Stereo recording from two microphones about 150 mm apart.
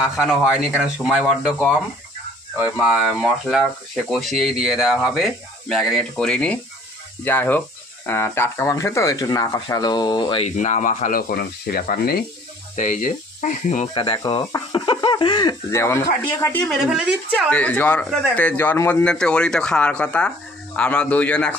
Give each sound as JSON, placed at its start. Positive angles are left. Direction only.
{"t": 0.0, "sound": "speech", "side_deg": -5}
{"t": 2.6, "sound": "speech", "side_deg": -5}
{"t": 10.4, "sound": "speech", "side_deg": 55}
{"t": 12.7, "sound": "speech", "side_deg": 60}
{"t": 13.9, "sound": "speech", "side_deg": 30}
{"t": 16.6, "sound": "speech", "side_deg": -5}
{"t": 17.5, "sound": "speech", "side_deg": 10}